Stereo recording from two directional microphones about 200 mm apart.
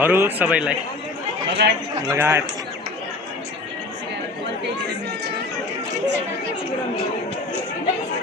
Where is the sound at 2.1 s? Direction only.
15° right (ahead or behind).